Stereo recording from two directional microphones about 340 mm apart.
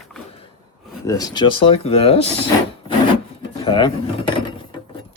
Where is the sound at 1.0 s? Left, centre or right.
Centre.